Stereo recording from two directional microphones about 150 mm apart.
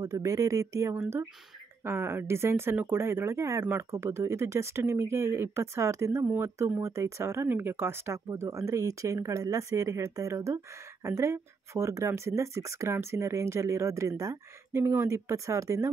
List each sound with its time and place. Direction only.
0.0 s speech: 20° right (ahead or behind)